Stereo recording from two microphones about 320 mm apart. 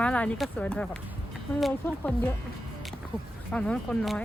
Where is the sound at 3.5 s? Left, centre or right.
Centre.